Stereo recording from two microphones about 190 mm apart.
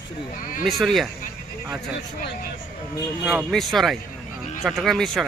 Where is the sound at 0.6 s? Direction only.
Centre (ahead or behind).